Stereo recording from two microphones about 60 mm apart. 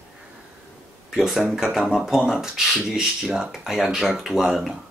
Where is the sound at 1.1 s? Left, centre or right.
Centre.